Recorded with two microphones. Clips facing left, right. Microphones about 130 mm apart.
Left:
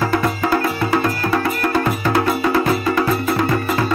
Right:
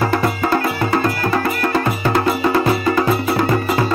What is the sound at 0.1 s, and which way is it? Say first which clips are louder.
Music: right 1 dB; 5° right (ahead or behind).